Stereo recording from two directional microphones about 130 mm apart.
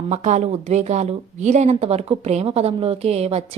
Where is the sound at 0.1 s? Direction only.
65° right (ahead or behind).